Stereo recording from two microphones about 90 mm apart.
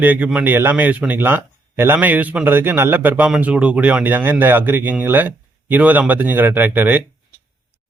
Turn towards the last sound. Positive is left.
turn(degrees=-20)  # may be behind; listen again after turning